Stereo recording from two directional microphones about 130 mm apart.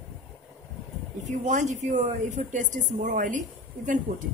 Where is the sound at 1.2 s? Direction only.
65° right (ahead or behind).